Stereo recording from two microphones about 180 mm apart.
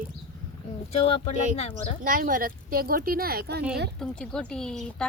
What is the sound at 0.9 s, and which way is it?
Speech, 35° left (ahead or behind).